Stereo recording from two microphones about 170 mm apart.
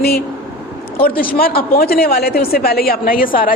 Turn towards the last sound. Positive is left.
turn(degrees=55)  # may be behind; listen again after turning